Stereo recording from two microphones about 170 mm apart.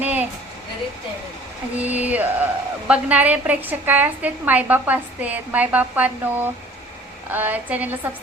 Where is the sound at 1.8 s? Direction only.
10° right (ahead or behind).